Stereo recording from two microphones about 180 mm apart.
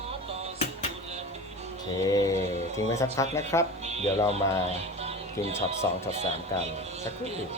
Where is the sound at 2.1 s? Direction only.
20° left (ahead or behind).